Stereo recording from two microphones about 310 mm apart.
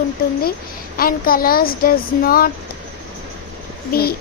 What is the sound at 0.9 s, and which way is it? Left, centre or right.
A woman's voice, left.